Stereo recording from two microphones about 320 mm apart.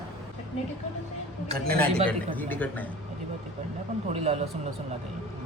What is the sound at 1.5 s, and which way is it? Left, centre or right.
Speech, right.